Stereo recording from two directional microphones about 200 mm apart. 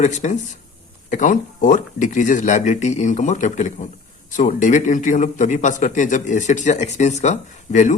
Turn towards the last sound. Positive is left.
turn(degrees=40)  # may be behind; listen again after turning